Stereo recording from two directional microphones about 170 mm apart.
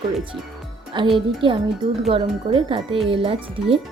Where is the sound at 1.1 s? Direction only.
30° right (ahead or behind).